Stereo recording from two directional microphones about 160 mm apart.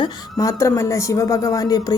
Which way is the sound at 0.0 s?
20° left (ahead or behind).